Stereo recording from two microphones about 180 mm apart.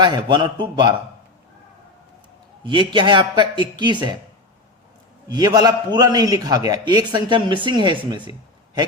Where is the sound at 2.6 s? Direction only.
25° right (ahead or behind).